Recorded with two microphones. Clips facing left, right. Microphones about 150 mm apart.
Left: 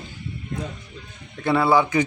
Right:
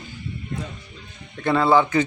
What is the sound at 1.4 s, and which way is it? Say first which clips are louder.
Speech: right 1 dB; 10° left (ahead or behind).